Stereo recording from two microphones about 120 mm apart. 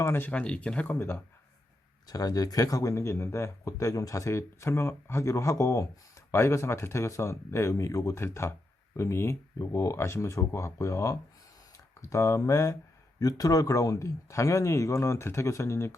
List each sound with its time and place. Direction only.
0.0 s speech: 20° left (ahead or behind)
2.0 s speech: 30° left (ahead or behind)